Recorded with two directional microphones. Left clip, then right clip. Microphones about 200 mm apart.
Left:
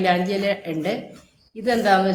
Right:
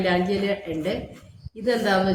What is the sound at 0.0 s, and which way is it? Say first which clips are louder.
A woman's voice: left 3 dB; 50° left (ahead or behind).